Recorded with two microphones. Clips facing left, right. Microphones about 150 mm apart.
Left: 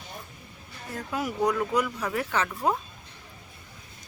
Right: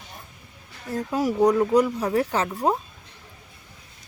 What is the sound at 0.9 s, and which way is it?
A woman's voice, 35° right (ahead or behind).